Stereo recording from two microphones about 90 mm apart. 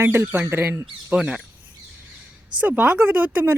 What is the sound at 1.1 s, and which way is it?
Speech, 10° right (ahead or behind).